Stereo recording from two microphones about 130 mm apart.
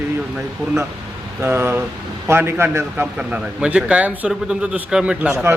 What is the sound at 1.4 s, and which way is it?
A man's voice, 20° right (ahead or behind).